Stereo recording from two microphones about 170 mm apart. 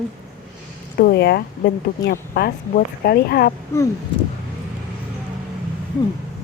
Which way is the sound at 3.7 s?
15° left (ahead or behind).